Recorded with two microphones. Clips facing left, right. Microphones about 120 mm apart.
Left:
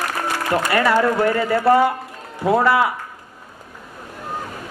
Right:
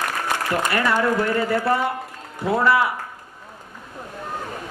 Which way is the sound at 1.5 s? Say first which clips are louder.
Left 6 dB; 25° left (ahead or behind).